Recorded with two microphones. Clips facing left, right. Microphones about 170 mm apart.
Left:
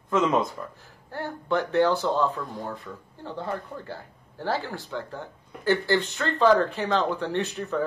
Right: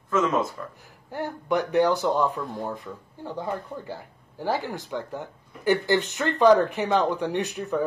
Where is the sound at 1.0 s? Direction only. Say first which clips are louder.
Right 1 dB; 15° right (ahead or behind).